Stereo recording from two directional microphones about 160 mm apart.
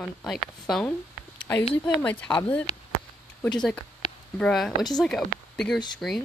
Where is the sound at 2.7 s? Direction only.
40° left (ahead or behind).